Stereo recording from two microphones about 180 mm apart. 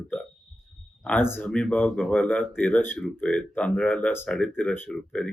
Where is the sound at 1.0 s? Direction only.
10° left (ahead or behind).